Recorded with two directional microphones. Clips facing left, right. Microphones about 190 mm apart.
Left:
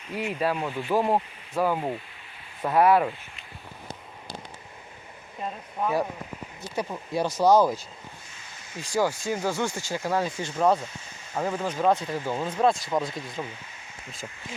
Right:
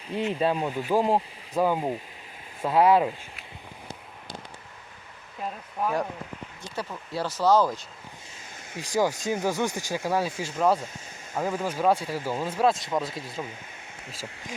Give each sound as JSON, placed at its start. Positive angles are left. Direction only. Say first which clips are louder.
{"t": 0.1, "sound": "speech", "louder": "right 2 dB", "side_deg": -30}
{"t": 5.4, "sound": "speech", "louder": "even", "side_deg": 5}
{"t": 6.7, "sound": "speech", "louder": "left 4 dB", "side_deg": 20}
{"t": 8.7, "sound": "speech", "louder": "even", "side_deg": -15}